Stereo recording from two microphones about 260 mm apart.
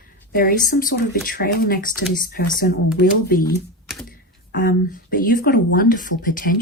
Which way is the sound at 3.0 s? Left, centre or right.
Left.